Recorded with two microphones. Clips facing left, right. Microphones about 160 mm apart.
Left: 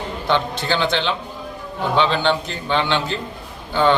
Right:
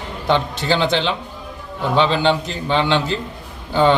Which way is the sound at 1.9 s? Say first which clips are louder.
Right 2 dB; centre (ahead or behind).